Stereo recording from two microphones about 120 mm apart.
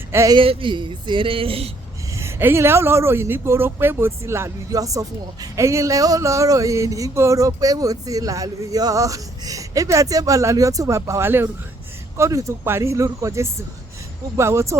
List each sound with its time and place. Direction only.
0.1 s speech: 25° right (ahead or behind)
0.3 s speech: 45° right (ahead or behind)
2.1 s speech: 20° right (ahead or behind)